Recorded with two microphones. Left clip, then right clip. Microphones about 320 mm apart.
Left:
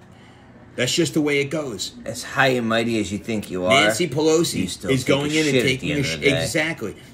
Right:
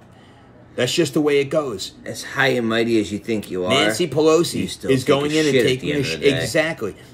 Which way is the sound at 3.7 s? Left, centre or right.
Centre.